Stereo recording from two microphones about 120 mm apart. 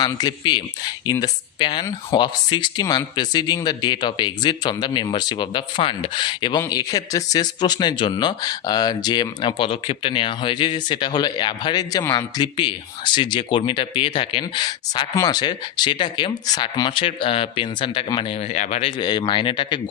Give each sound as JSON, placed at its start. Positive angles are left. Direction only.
{"t": 0.0, "sound": "speech", "side_deg": 35}
{"t": 18.8, "sound": "speech", "side_deg": 45}